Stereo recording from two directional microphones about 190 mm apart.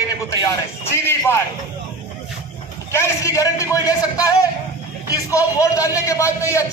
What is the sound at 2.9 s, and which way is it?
A man's voice, 15° left (ahead or behind).